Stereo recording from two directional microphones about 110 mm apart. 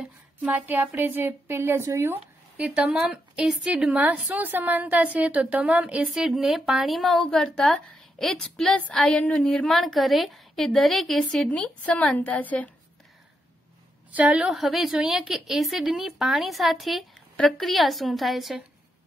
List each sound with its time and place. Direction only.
0.4 s a woman's voice: 10° right (ahead or behind)
2.5 s a woman's voice: 10° right (ahead or behind); by 12.7 s 15° left (ahead or behind)
14.1 s a woman's voice: 10° right (ahead or behind)